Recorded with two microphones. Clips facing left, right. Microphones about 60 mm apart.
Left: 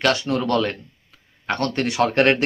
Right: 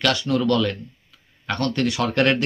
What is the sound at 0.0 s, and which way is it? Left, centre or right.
Speech, left.